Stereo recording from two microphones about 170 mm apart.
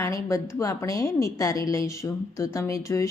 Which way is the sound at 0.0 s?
20° left (ahead or behind).